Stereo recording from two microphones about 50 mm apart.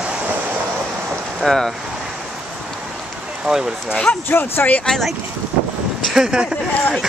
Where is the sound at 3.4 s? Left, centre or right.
Centre.